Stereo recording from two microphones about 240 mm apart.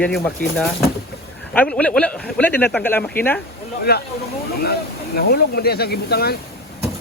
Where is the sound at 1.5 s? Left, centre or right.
Centre.